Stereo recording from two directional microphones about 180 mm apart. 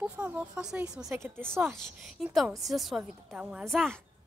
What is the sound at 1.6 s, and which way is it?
A woman's voice, centre (ahead or behind).